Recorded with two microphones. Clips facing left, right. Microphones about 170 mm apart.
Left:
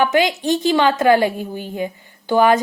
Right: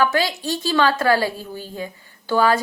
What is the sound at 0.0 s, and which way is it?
A woman's voice, 20° left (ahead or behind).